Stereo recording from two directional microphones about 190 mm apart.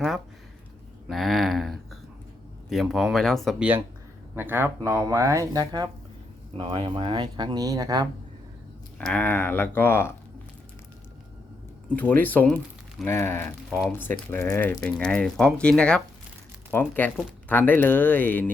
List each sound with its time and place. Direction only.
1.0 s a sound: centre (ahead or behind)
2.6 s speech: centre (ahead or behind)
4.4 s speech: 10° right (ahead or behind)
9.0 s speech: 5° left (ahead or behind)
11.9 s speech: 10° left (ahead or behind)